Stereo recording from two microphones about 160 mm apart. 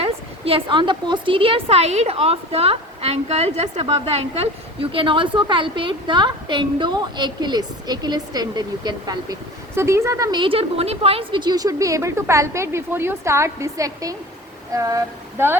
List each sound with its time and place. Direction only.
0.0 s a woman's voice: 35° right (ahead or behind); by 15.5 s 15° right (ahead or behind)